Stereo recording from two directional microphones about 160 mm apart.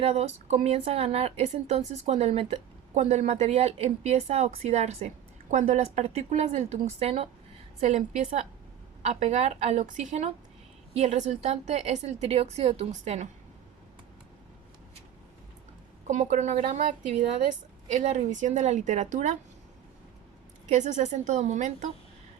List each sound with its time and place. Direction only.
0.0 s a woman's voice: 40° right (ahead or behind)
16.0 s a woman's voice: 50° right (ahead or behind)
17.9 s a woman's voice: 45° right (ahead or behind)
20.7 s a woman's voice: 45° right (ahead or behind)